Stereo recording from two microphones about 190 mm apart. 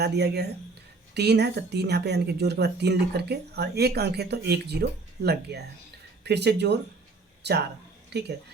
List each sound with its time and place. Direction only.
0.0 s speech: 60° right (ahead or behind)